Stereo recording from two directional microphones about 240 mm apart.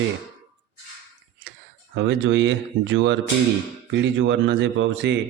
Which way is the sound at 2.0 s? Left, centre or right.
Right.